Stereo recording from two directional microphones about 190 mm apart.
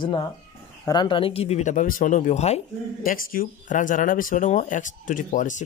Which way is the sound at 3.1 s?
45° left (ahead or behind).